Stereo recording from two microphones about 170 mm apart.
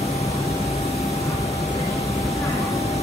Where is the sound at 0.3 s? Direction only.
20° left (ahead or behind).